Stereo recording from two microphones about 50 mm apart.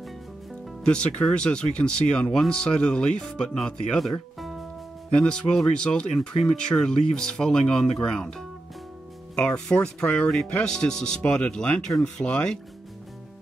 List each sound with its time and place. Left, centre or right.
0.8 s speech: left
4.4 s music: centre
5.1 s speech: centre
12.0 s speech: centre